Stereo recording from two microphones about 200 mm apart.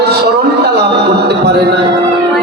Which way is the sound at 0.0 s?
55° right (ahead or behind).